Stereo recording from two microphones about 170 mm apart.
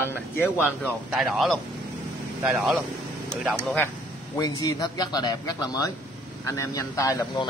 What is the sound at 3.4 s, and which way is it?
Speech, 10° left (ahead or behind).